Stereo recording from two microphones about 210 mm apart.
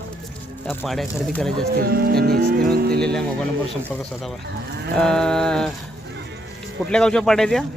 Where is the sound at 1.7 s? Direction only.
45° right (ahead or behind).